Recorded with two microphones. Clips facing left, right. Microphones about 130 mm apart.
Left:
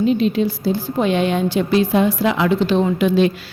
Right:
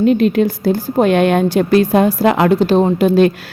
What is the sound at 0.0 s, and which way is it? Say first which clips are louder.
Speech: right 4 dB; 55° right (ahead or behind).